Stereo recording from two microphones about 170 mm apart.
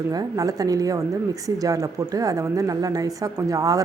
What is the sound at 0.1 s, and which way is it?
Speech, 20° right (ahead or behind).